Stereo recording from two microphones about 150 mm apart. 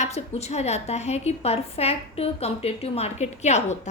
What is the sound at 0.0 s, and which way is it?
A woman's voice, 45° left (ahead or behind).